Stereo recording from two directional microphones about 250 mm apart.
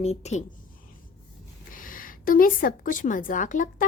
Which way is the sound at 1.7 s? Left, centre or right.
Left.